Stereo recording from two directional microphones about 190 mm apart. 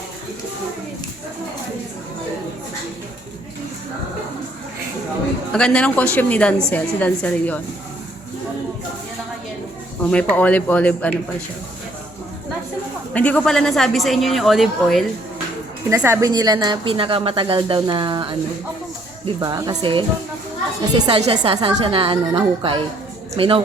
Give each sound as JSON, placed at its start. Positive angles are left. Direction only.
{"t": 5.5, "sound": "a woman's voice", "side_deg": 5}
{"t": 10.1, "sound": "speech", "side_deg": 5}
{"t": 13.1, "sound": "a woman's voice", "side_deg": 5}
{"t": 15.9, "sound": "a woman's voice", "side_deg": -10}